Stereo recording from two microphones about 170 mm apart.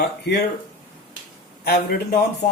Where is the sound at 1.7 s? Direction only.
65° left (ahead or behind).